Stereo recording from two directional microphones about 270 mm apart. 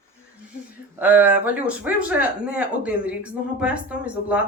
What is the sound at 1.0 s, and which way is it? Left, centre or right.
Speech, centre.